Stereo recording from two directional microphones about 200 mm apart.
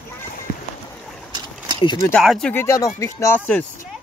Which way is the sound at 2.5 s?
15° left (ahead or behind).